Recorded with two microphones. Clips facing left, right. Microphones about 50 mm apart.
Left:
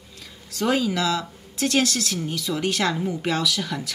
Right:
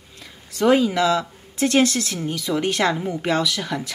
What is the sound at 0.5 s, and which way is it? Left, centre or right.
A woman's voice, right.